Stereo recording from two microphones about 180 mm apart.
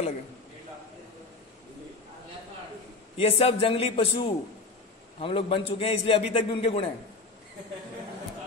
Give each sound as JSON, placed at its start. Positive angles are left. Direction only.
{"t": 3.2, "sound": "a man's voice", "side_deg": 35}